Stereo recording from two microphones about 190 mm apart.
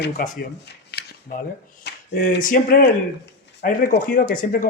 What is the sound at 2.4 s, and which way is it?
Speech, 50° left (ahead or behind).